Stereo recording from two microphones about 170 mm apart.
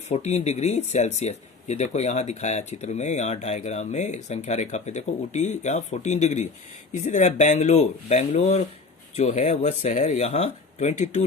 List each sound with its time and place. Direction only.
0.1 s speech: 40° left (ahead or behind)